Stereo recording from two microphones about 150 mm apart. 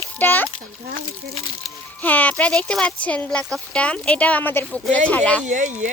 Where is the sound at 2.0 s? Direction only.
10° left (ahead or behind).